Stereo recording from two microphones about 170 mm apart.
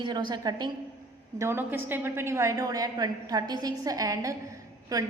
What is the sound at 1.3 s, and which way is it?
A woman's voice, 15° right (ahead or behind).